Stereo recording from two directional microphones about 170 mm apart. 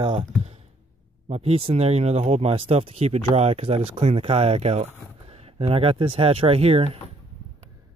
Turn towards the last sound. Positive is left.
turn(degrees=-35)  # may be behind; listen again after turning